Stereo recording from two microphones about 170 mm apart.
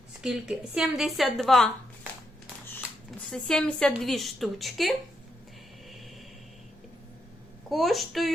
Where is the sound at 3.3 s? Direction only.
5° left (ahead or behind).